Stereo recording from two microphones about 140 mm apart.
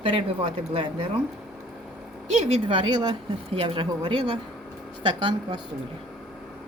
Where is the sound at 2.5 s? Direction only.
40° right (ahead or behind).